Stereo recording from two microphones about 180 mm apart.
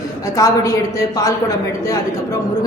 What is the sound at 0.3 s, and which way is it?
Speech, 20° left (ahead or behind).